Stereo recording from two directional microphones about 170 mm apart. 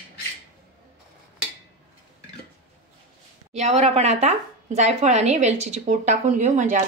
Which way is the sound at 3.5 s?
40° right (ahead or behind).